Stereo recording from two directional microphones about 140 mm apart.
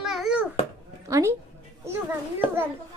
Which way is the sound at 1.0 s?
20° right (ahead or behind).